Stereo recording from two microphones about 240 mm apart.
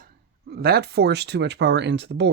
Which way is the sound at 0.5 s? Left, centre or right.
Right.